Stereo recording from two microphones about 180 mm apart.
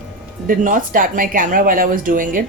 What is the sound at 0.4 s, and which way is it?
Speech, 50° right (ahead or behind).